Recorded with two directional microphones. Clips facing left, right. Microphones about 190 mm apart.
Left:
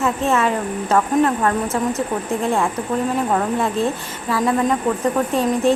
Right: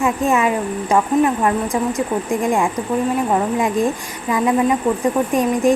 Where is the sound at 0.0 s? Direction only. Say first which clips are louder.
Right 2 dB; 15° right (ahead or behind).